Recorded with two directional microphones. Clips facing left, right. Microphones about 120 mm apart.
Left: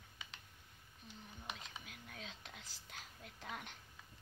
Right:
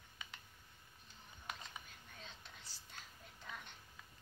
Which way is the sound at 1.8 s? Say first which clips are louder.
Left 4 dB; 85° left.